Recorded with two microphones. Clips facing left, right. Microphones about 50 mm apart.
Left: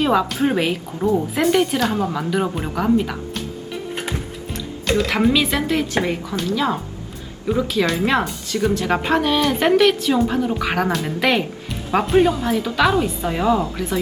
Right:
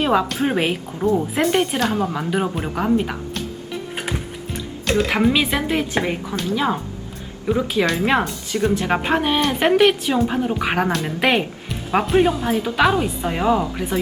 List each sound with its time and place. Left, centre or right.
0.0 s a woman's voice: centre
3.9 s music: centre
5.3 s a woman's voice: centre
6.0 s speech: centre
6.5 s a woman's voice: centre
8.7 s a woman's voice: centre
10.8 s speech: centre
11.2 s a woman's voice: centre
11.7 s a woman's voice: centre